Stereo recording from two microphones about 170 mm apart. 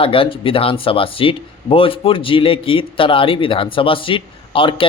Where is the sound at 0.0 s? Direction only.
30° left (ahead or behind).